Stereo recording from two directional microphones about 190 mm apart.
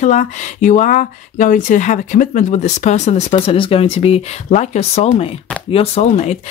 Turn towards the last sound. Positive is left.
turn(degrees=35)  # may be behind; listen again after turning